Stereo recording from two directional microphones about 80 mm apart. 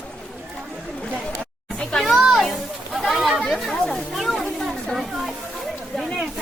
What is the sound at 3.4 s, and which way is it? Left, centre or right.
Chatter, centre.